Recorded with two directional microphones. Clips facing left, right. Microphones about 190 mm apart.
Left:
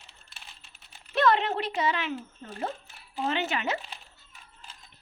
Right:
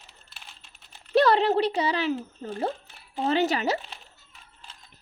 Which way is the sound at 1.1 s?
35° right (ahead or behind).